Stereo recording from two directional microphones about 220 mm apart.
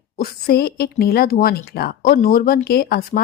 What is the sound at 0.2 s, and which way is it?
Speech, 45° left (ahead or behind).